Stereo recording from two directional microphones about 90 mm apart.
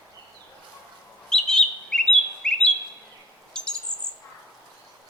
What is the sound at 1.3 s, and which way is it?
Chirp, 10° left (ahead or behind).